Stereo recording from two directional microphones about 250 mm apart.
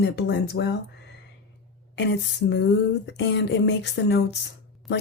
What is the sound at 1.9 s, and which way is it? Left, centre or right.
Speech, left.